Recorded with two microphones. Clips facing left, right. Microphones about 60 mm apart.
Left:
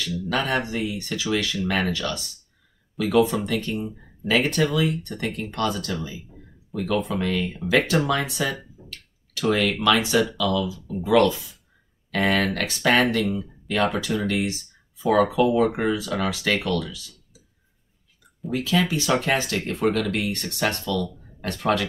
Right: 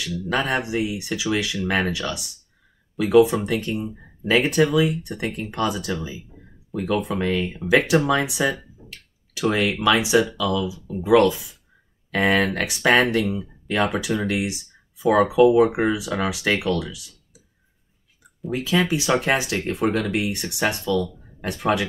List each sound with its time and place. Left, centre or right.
0.4 s speech: centre
4.3 s speech: centre
7.1 s speech: centre
18.5 s speech: centre